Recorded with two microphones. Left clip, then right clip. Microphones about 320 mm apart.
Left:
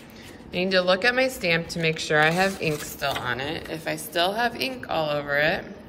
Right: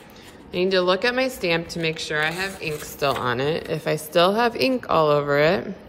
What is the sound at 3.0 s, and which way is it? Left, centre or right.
A man's voice, centre.